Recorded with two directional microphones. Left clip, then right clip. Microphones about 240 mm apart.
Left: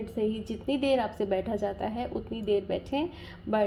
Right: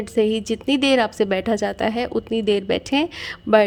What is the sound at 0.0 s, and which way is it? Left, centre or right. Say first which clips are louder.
A woman's voice: right 11 dB; right.